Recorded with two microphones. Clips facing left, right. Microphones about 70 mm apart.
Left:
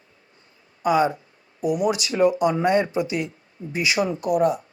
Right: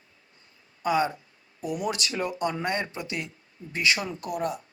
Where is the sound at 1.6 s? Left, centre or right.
Left.